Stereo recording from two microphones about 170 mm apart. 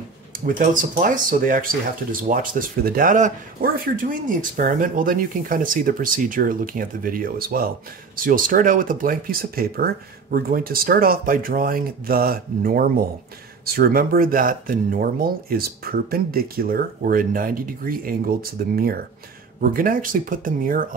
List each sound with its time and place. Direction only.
0.5 s speech: 50° right (ahead or behind)